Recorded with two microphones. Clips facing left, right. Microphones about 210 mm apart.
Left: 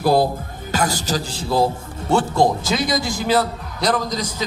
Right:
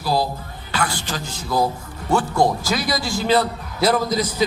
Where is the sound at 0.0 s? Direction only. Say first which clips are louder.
Left 5 dB; 55° left (ahead or behind).